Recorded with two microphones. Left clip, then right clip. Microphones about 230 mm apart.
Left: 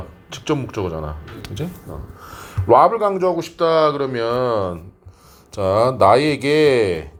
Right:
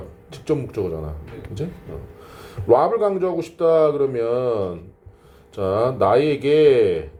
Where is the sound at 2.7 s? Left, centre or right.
Left.